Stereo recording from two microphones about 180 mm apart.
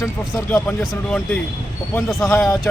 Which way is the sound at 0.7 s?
5° left (ahead or behind).